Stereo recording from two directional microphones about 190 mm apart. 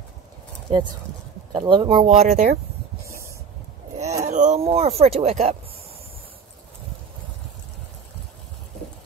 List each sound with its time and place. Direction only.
0.7 s speech: 25° right (ahead or behind); by 2.6 s 40° right (ahead or behind)
4.3 s speech: 40° right (ahead or behind)